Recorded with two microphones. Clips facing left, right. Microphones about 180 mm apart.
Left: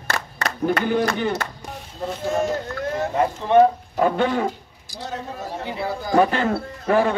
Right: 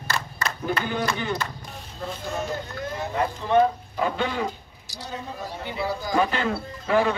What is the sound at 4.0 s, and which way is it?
Speech, 45° left (ahead or behind).